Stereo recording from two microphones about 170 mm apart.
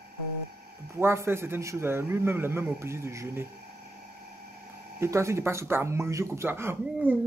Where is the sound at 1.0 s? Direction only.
15° right (ahead or behind).